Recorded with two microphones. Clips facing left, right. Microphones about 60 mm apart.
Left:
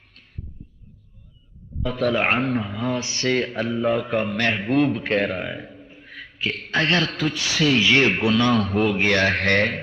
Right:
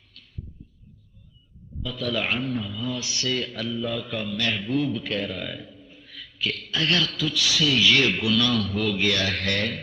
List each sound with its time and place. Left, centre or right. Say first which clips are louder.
1.8 s a man's voice: left 7 dB; left
4.9 s a man's voice: left 6 dB; left
5.6 s a sound: left 5 dB; left
5.9 s a man's voice: left 4 dB; left